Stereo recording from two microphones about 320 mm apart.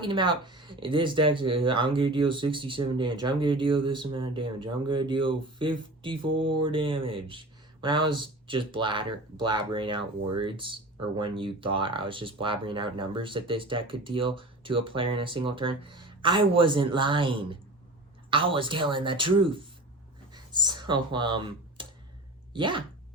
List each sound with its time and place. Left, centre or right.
0.0 s speech: centre